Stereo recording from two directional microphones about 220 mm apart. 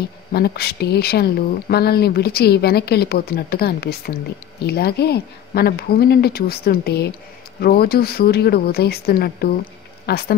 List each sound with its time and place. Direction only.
0.3 s speech: 45° left (ahead or behind)